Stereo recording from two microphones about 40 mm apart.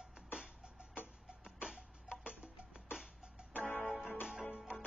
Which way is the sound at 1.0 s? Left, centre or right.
Left.